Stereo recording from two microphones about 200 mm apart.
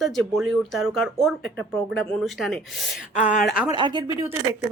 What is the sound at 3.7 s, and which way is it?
Speech, 20° right (ahead or behind).